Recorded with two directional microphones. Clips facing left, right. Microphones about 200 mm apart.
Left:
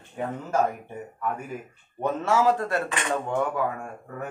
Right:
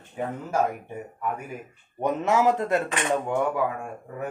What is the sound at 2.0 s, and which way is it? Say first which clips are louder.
Speech: right 1 dB; 15° right (ahead or behind).